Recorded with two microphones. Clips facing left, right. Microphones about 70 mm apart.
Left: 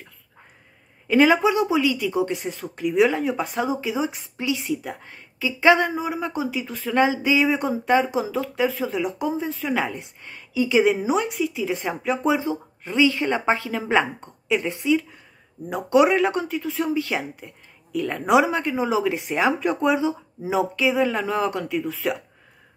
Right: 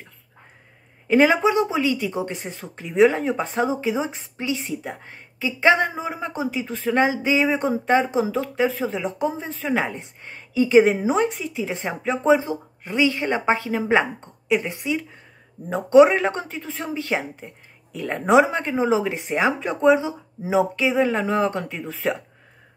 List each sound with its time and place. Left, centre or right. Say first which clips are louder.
1.0 s a woman's voice: even; right